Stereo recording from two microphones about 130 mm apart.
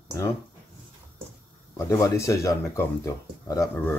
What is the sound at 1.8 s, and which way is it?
Speech, 25° left (ahead or behind).